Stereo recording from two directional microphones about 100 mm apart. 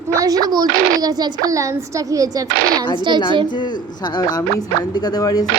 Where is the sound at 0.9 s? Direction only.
40° right (ahead or behind).